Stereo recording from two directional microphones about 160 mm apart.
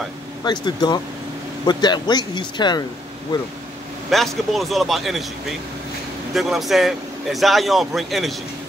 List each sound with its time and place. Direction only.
0.4 s speech: 25° left (ahead or behind)
4.1 s speech: centre (ahead or behind)
6.3 s speech: centre (ahead or behind)